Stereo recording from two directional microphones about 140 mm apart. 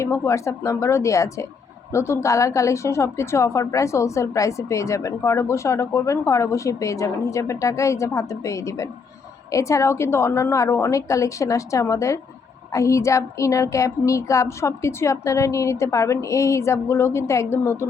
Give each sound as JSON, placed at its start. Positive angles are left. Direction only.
{"t": 0.0, "sound": "a woman's voice", "side_deg": 20}